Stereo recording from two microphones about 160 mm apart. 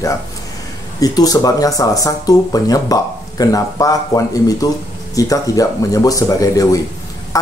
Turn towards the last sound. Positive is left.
turn(degrees=20)  # may be behind; listen again after turning